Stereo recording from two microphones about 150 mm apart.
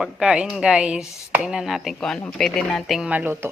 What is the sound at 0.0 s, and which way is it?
Speech, 5° right (ahead or behind).